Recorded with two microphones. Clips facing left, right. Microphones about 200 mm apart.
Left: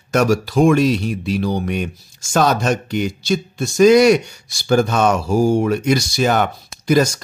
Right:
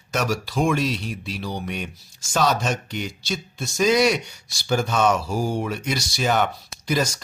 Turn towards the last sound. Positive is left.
turn(degrees=50)  # may be behind; listen again after turning